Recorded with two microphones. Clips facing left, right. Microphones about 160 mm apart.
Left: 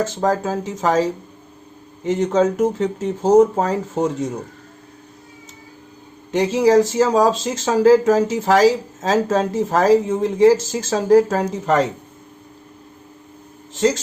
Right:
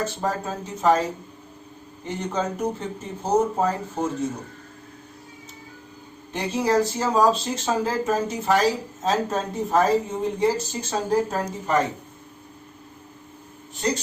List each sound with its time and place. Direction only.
0.0 s speech: 90° left
6.3 s speech: 90° left
13.7 s speech: 90° left